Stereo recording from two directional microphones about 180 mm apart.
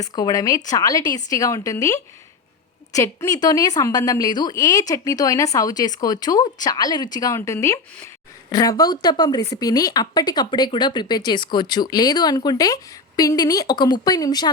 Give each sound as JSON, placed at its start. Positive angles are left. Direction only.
{"t": 0.0, "sound": "speech", "side_deg": 20}